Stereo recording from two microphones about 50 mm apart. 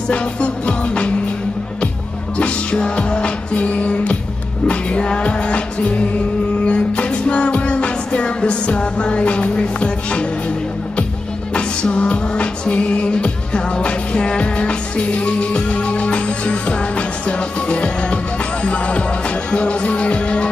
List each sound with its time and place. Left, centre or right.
0.1 s music: left
2.3 s music: left
11.5 s music: left